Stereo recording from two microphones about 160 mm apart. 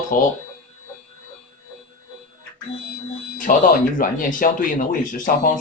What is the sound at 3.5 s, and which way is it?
Speech, 55° left (ahead or behind).